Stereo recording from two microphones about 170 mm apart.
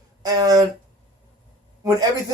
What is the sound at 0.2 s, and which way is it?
Speech, 20° right (ahead or behind).